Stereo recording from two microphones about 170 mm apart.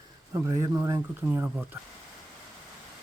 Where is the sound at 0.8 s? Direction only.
15° right (ahead or behind).